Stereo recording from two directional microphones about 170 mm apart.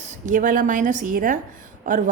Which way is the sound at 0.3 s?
50° right (ahead or behind).